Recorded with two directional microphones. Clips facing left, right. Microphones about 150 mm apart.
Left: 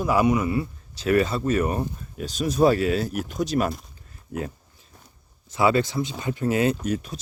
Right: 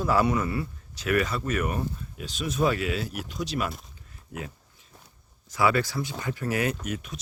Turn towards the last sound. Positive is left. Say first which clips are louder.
# left 7 dB
turn(degrees=35)  # may be behind; listen again after turning